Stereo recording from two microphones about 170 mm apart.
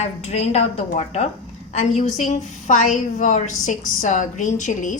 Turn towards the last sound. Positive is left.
turn(degrees=45)  # may be behind; listen again after turning